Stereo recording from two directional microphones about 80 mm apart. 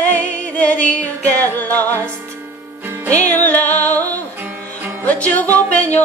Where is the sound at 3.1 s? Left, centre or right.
Centre.